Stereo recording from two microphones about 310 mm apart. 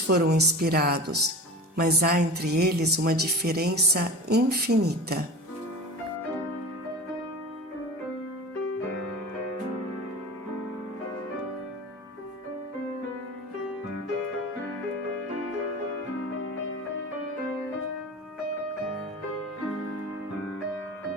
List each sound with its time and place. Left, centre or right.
0.1 s speech: right